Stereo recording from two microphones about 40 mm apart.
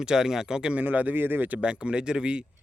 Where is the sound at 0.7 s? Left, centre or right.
Right.